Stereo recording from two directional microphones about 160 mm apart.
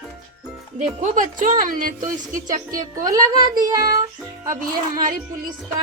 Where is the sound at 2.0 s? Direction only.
20° right (ahead or behind).